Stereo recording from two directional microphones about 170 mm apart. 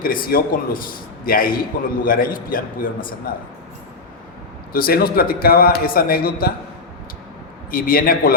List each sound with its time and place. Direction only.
0.0 s a man's voice: 55° left (ahead or behind)
4.7 s a man's voice: 60° left (ahead or behind)
7.7 s a man's voice: 55° left (ahead or behind)